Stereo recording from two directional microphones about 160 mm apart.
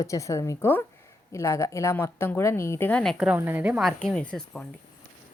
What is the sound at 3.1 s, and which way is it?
Speech, 5° right (ahead or behind).